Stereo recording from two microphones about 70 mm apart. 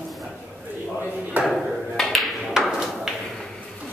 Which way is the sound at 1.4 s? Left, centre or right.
Centre.